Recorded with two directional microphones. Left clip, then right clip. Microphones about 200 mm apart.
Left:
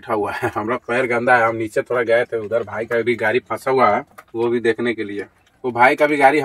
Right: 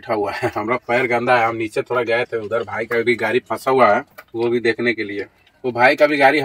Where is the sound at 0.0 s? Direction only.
Centre (ahead or behind).